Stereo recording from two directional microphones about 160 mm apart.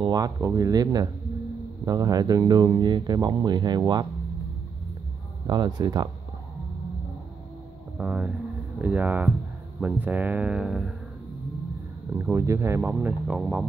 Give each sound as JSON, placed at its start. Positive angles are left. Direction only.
{"t": 0.0, "sound": "speech", "side_deg": -25}
{"t": 5.5, "sound": "speech", "side_deg": -25}
{"t": 8.0, "sound": "speech", "side_deg": -10}
{"t": 12.2, "sound": "speech", "side_deg": -15}